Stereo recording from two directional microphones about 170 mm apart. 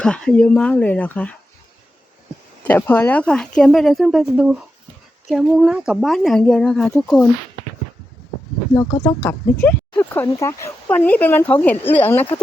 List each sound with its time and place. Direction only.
0.0 s speech: 5° left (ahead or behind)
2.6 s speech: 10° left (ahead or behind)
8.7 s speech: 20° left (ahead or behind)
9.6 s speech: 10° left (ahead or behind)